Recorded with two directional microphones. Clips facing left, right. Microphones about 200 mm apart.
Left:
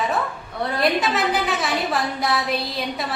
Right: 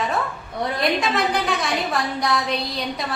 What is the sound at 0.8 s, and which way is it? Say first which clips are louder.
A woman's voice: left 1 dB; 5° left (ahead or behind).